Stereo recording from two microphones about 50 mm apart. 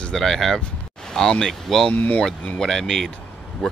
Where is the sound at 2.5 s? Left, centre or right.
Centre.